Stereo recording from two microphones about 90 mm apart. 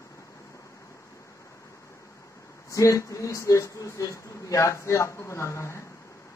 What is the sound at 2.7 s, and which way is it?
Speech, 40° left (ahead or behind).